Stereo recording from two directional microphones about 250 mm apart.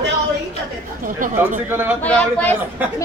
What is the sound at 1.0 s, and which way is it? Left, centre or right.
Speech, right.